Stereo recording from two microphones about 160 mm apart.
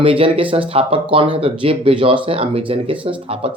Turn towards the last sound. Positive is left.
turn(degrees=-35)  # may be behind; listen again after turning